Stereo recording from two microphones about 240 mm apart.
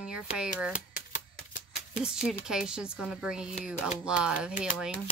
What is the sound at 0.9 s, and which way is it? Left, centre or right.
Typewriter, left.